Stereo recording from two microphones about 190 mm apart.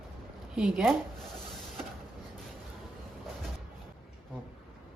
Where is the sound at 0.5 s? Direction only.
5° right (ahead or behind).